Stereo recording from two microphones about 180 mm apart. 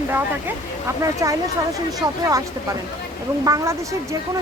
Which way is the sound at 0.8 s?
15° right (ahead or behind).